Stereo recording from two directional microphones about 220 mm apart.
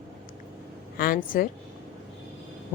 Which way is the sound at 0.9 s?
40° left (ahead or behind).